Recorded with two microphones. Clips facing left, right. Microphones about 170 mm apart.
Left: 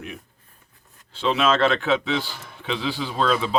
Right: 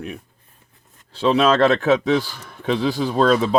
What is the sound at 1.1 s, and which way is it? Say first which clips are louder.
Speech: right 5 dB; 40° right (ahead or behind).